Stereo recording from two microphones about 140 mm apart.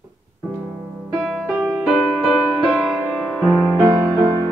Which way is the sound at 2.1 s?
5° right (ahead or behind).